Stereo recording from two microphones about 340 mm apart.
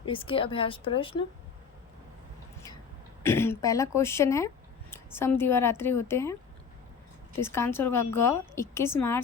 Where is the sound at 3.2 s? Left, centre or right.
Centre.